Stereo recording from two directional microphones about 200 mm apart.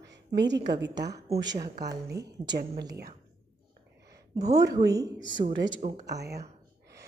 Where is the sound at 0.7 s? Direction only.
60° right (ahead or behind).